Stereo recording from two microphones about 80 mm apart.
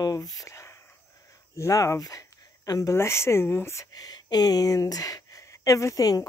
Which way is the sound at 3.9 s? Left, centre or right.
Left.